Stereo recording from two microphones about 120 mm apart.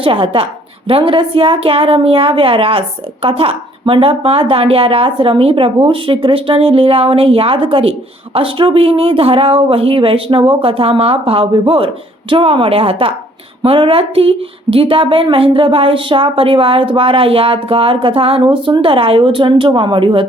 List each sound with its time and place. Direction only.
0.0 s a woman's voice: 50° right (ahead or behind)